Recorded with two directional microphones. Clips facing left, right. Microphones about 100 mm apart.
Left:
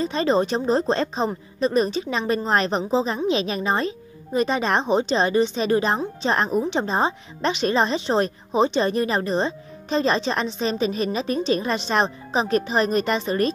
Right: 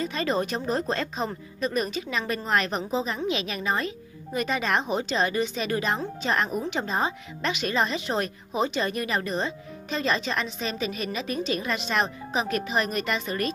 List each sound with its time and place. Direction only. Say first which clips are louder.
0.0 s a woman's voice: left 6 dB; 30° left (ahead or behind)